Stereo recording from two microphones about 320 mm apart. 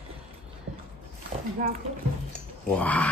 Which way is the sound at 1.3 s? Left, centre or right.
Centre.